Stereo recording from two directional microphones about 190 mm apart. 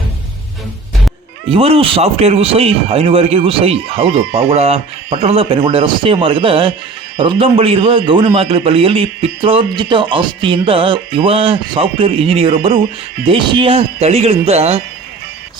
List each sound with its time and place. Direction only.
1.5 s a man's voice: 30° right (ahead or behind)